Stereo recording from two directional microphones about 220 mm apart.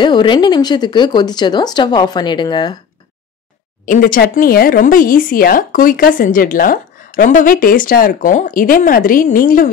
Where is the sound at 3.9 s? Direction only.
40° left (ahead or behind).